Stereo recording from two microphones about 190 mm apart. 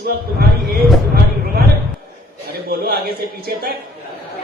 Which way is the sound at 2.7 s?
55° right (ahead or behind).